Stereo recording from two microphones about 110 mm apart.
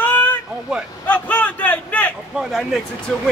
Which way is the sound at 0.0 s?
15° left (ahead or behind).